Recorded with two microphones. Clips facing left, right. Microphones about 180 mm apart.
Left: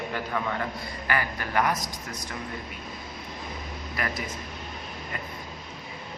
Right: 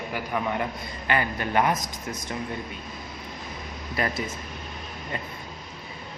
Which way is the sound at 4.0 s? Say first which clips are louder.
Right 4 dB; 25° right (ahead or behind).